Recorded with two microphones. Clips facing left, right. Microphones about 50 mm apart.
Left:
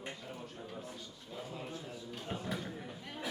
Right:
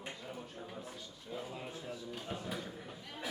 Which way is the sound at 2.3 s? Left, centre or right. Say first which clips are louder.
Left 3 dB; centre.